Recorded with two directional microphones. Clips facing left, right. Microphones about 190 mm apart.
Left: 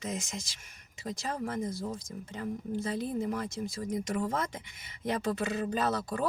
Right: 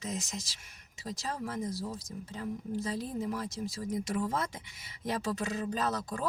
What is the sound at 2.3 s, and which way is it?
Speech, 60° left (ahead or behind).